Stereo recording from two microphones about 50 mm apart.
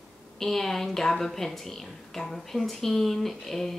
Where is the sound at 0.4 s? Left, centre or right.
Centre.